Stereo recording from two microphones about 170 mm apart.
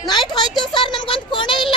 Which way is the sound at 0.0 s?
25° left (ahead or behind).